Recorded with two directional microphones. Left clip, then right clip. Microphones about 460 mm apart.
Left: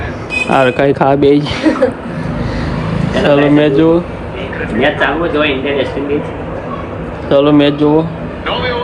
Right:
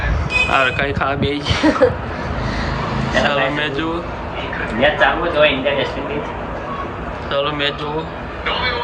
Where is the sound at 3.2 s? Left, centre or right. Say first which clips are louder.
Left 12 dB; centre.